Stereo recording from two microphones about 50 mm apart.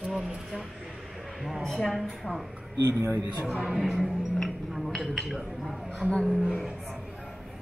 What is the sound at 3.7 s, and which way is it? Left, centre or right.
Music, centre.